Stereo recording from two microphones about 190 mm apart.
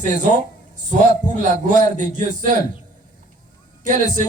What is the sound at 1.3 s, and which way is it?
A man's voice, 40° right (ahead or behind).